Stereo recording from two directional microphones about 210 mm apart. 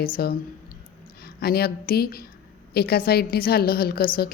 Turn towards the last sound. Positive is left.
turn(degrees=45)  # may be behind; listen again after turning